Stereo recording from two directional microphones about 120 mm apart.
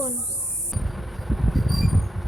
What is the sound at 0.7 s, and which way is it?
Music, centre (ahead or behind).